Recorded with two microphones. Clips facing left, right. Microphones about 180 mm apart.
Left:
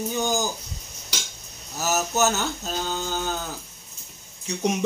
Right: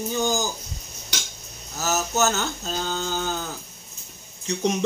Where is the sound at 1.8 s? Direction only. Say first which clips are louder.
Even; 10° left (ahead or behind).